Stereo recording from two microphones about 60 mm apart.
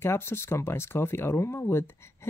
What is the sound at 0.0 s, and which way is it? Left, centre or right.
Speech, left.